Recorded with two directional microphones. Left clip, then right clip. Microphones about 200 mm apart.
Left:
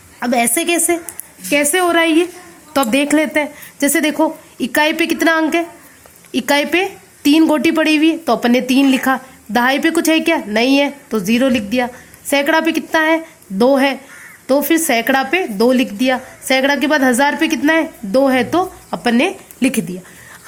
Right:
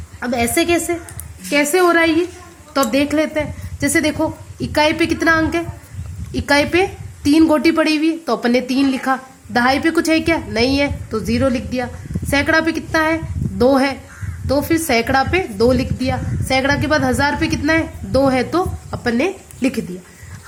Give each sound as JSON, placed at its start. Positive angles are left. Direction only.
{"t": 0.2, "sound": "a woman's voice", "side_deg": 50}